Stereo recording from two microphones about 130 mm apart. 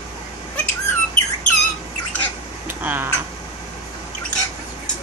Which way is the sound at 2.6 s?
15° right (ahead or behind).